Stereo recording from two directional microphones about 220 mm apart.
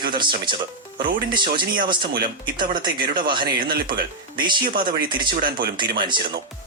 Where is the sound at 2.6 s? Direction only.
20° right (ahead or behind).